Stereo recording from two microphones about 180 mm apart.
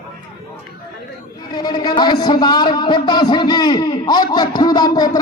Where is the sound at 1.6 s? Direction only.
25° left (ahead or behind).